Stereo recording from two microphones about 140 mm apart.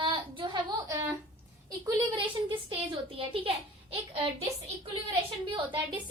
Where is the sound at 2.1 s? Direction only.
35° right (ahead or behind).